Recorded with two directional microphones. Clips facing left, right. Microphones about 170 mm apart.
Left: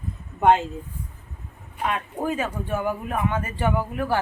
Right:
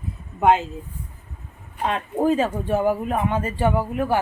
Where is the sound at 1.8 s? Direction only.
30° right (ahead or behind).